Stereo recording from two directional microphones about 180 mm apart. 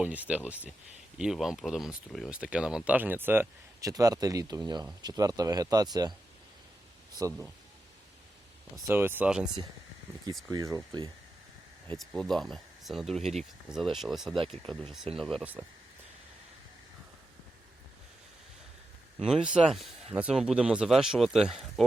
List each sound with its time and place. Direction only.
0.0 s speech: 10° right (ahead or behind)
7.2 s speech: 15° right (ahead or behind)
8.7 s speech: 10° right (ahead or behind)
10.5 s speech: 20° right (ahead or behind)
11.9 s speech: centre (ahead or behind)
19.2 s speech: 5° right (ahead or behind)